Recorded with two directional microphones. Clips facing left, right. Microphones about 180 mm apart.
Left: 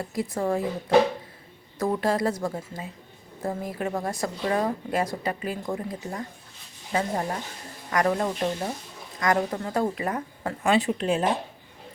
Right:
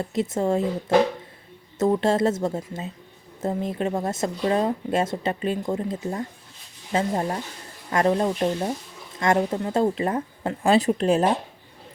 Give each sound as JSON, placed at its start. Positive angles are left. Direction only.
{"t": 0.0, "sound": "speech", "side_deg": -25}
{"t": 1.8, "sound": "speech", "side_deg": -25}